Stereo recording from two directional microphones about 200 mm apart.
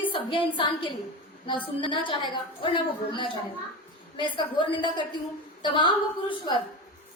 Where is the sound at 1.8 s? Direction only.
25° left (ahead or behind).